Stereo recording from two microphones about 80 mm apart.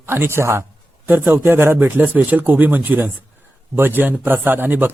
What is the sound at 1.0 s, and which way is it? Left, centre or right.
A man's voice, right.